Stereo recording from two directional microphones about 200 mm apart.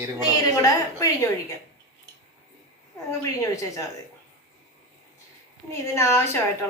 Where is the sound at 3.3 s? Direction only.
15° left (ahead or behind).